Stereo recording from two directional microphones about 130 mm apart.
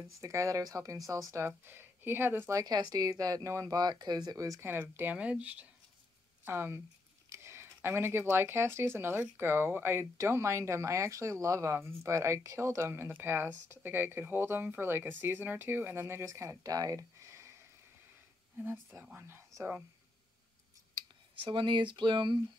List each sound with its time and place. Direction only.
0.2 s speech: 25° right (ahead or behind)
2.6 s speech: 30° right (ahead or behind)
19.1 s speech: 20° right (ahead or behind)
20.9 s speech: 40° right (ahead or behind)